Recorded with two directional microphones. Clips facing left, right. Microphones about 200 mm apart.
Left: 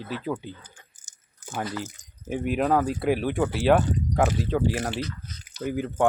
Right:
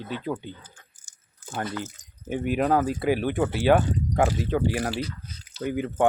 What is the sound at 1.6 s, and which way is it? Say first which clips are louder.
Speech: even; centre (ahead or behind).